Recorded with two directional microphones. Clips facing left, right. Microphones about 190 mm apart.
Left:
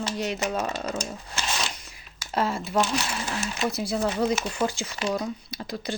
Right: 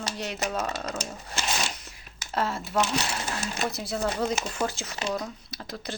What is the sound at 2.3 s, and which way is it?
Speech, centre (ahead or behind).